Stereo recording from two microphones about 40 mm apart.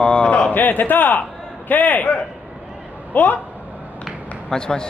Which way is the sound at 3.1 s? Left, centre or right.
Left.